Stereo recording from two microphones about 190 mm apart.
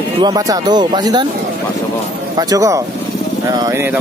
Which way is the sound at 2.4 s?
20° right (ahead or behind).